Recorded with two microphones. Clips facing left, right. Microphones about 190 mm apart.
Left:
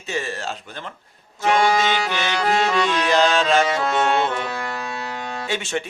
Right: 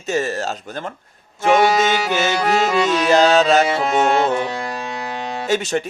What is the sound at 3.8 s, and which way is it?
Music, 20° right (ahead or behind).